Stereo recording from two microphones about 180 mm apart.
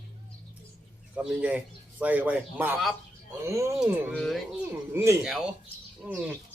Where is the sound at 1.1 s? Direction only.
5° right (ahead or behind).